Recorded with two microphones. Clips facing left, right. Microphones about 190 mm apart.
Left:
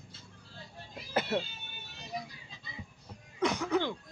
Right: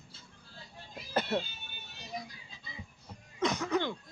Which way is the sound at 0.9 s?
10° left (ahead or behind).